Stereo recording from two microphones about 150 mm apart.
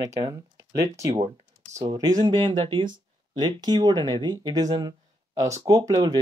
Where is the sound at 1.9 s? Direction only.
25° right (ahead or behind).